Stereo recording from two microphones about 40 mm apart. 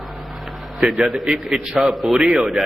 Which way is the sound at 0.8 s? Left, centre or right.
Centre.